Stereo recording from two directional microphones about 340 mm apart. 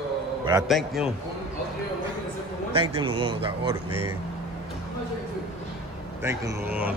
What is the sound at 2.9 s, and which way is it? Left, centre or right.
Speech, centre.